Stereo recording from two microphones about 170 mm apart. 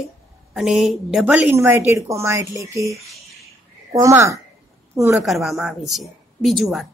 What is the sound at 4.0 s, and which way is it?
A woman's voice, 20° right (ahead or behind).